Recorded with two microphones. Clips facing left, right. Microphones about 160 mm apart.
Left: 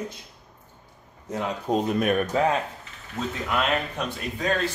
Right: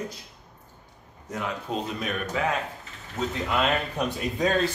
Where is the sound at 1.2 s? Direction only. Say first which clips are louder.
Left 4 dB; 30° left (ahead or behind).